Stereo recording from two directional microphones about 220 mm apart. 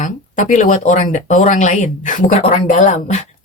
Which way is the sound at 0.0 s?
35° left (ahead or behind).